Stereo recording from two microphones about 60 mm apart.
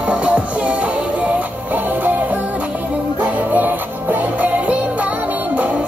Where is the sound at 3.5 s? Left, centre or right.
Right.